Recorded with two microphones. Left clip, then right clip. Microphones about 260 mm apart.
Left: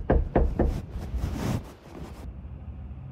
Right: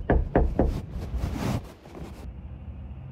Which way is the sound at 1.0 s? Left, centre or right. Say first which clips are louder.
Right 1 dB; centre.